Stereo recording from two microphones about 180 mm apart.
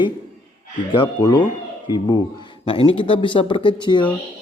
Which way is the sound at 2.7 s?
30° left (ahead or behind).